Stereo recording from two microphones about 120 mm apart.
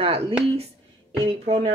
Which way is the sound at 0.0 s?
55° right (ahead or behind).